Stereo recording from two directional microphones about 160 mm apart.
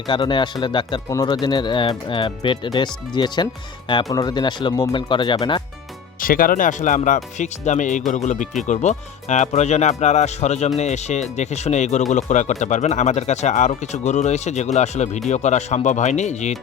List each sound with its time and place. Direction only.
0.1 s speech: 30° left (ahead or behind)
6.2 s speech: 60° left (ahead or behind); by 16.6 s 45° left (ahead or behind)